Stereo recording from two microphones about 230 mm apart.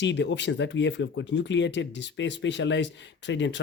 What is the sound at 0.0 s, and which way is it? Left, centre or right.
Speech, left.